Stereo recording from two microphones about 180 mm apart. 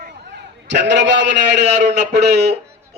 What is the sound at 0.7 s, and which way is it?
A man's voice, 75° right (ahead or behind).